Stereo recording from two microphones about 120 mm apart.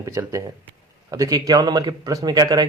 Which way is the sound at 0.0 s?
25° right (ahead or behind).